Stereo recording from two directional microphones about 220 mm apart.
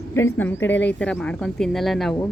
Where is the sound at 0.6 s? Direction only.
55° left (ahead or behind).